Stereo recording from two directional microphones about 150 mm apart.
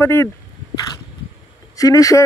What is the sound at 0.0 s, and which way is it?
Speech, 15° left (ahead or behind).